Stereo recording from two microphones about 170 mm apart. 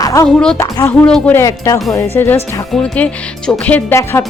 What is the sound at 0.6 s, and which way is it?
Speech, 15° left (ahead or behind).